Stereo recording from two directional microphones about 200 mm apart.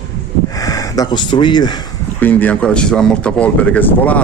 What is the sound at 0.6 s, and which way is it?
Speech, 15° left (ahead or behind).